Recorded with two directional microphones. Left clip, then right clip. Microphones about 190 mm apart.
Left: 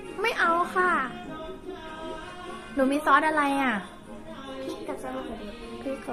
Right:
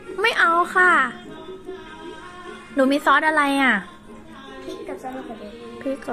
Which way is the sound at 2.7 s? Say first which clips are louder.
Right 4 dB; 35° right (ahead or behind).